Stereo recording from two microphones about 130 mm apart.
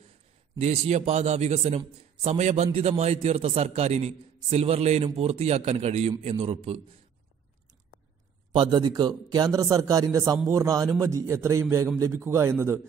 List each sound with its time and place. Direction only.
0.6 s a man's voice: 55° right (ahead or behind)
8.5 s speech: 35° right (ahead or behind); by 12.8 s 20° right (ahead or behind)